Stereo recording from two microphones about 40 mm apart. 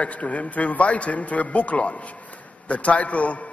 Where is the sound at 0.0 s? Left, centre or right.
Left.